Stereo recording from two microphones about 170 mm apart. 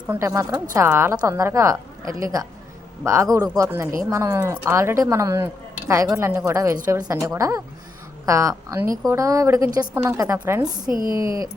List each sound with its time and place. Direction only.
0.1 s a woman's voice: 15° right (ahead or behind)